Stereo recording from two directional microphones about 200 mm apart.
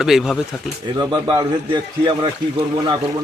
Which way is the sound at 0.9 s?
20° right (ahead or behind).